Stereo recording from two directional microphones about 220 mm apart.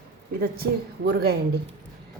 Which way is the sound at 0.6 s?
45° right (ahead or behind).